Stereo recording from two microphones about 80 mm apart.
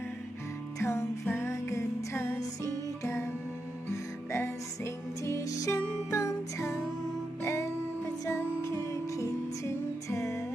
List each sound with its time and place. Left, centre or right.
0.8 s music: left